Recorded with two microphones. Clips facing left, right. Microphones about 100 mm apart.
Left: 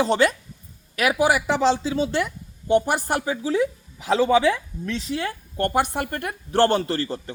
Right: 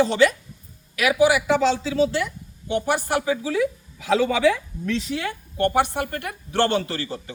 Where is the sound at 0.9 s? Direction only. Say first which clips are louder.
Right 2 dB; 40° left (ahead or behind).